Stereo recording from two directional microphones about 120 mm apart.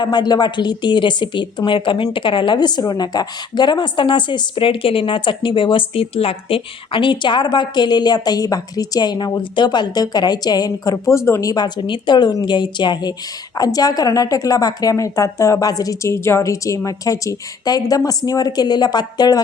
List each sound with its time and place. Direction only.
0.0 s a woman's voice: 35° left (ahead or behind)